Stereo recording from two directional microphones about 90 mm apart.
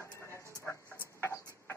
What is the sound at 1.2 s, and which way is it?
Music, 30° left (ahead or behind).